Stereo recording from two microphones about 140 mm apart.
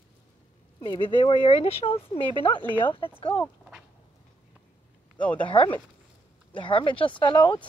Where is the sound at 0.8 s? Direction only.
35° left (ahead or behind).